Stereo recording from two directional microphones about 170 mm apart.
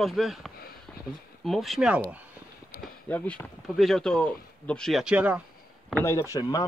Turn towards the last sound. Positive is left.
turn(degrees=20)  # may be behind; listen again after turning